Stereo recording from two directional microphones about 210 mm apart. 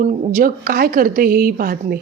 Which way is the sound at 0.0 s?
35° right (ahead or behind).